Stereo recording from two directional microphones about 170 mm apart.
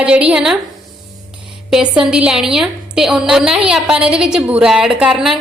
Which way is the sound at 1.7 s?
5° right (ahead or behind).